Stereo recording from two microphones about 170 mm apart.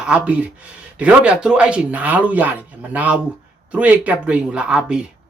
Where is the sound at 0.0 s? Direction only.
5° right (ahead or behind).